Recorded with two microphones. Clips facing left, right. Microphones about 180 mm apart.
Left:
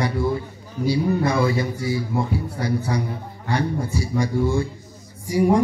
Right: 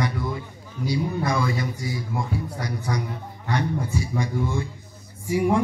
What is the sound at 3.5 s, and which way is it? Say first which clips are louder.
A man's voice: left 2 dB; 35° left (ahead or behind).